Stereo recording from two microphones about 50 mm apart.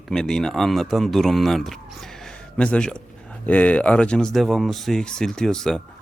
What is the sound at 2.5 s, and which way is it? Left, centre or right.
Speech, left.